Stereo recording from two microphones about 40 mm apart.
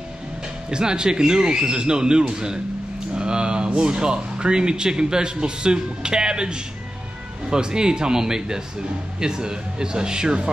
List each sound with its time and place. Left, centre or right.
0.7 s speech: right